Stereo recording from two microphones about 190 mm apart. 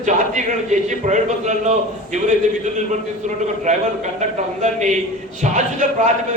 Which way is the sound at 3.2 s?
40° right (ahead or behind).